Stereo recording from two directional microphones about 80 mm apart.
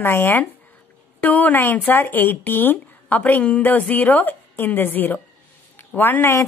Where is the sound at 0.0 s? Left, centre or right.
Left.